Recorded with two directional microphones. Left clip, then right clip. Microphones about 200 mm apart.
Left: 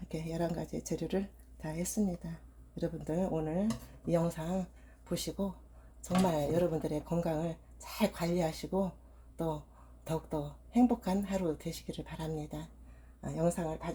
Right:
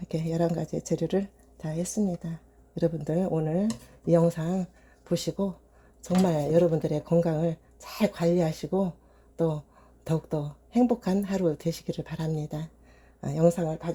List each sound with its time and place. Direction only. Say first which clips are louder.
0.1 s speech: right 8 dB; 45° right (ahead or behind)
2.7 s a woman's voice: right 8 dB; 40° right (ahead or behind)
10.0 s a woman's voice: right 6 dB; 45° right (ahead or behind)